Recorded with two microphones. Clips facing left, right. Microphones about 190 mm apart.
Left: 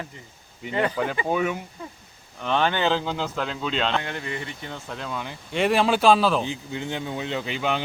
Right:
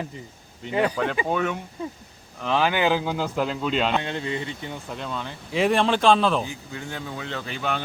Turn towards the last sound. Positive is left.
turn(degrees=15)  # may be behind; listen again after turning